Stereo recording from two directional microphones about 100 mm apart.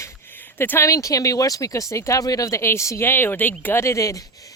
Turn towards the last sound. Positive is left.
turn(degrees=30)  # may be behind; listen again after turning